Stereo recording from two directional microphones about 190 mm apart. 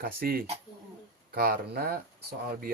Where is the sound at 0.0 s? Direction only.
50° right (ahead or behind).